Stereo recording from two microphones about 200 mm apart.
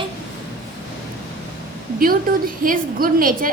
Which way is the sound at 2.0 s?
45° right (ahead or behind).